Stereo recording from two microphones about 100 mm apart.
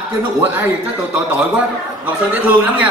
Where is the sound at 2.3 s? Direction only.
15° right (ahead or behind).